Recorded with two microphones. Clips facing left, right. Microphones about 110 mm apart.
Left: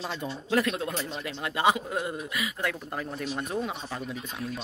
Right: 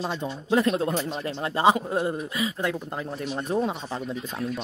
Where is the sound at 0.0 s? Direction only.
25° right (ahead or behind).